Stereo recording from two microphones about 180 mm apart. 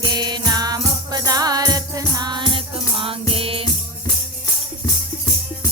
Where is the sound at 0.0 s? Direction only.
25° right (ahead or behind).